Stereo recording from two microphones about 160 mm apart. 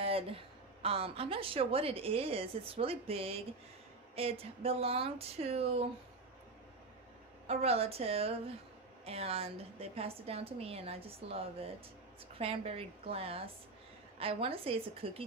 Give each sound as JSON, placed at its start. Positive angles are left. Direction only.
{"t": 0.0, "sound": "a sound", "side_deg": -35}
{"t": 0.8, "sound": "a woman's voice", "side_deg": -35}
{"t": 7.4, "sound": "a woman's voice", "side_deg": -40}